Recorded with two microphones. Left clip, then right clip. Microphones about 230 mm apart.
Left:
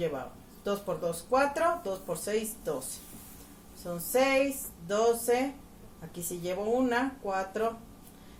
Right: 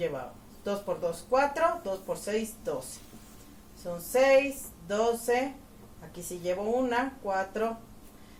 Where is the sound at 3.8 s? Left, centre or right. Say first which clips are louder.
Right 1 dB; centre.